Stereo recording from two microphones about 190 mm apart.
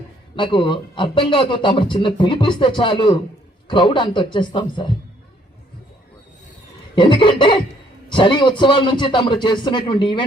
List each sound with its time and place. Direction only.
0.3 s a man's voice: 25° left (ahead or behind)
6.9 s a man's voice: 25° left (ahead or behind)